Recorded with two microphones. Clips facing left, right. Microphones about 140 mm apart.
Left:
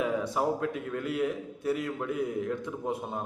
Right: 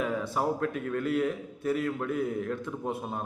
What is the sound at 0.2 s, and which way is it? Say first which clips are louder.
A man's voice: even; 15° left (ahead or behind).